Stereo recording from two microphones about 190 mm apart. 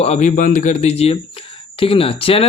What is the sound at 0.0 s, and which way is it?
Speech, 35° left (ahead or behind).